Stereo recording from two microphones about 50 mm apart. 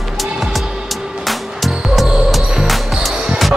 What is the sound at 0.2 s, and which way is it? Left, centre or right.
Music, centre.